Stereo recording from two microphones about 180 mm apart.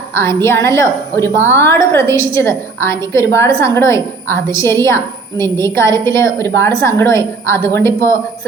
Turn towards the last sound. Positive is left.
turn(degrees=15)  # may be behind; listen again after turning